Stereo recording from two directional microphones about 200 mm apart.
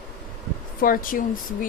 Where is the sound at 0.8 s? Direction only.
45° left (ahead or behind).